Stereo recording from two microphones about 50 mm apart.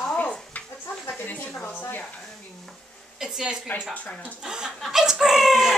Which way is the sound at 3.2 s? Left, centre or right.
Centre.